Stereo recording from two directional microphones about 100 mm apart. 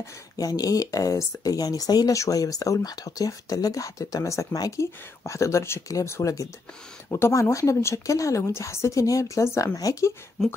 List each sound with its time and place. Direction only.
0.0 s speech: 40° left (ahead or behind)